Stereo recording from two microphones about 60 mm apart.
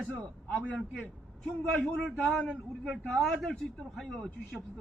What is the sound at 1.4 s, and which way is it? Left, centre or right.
Speech, centre.